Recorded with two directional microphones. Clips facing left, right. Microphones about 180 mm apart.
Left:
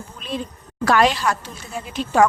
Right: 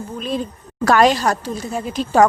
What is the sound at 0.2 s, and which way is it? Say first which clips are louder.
A woman's voice: right 4 dB; 40° right (ahead or behind).